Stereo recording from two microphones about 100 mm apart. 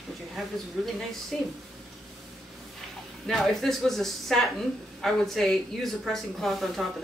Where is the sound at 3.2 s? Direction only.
Centre (ahead or behind).